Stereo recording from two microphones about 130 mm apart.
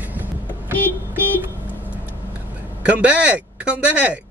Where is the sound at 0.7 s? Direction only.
15° left (ahead or behind).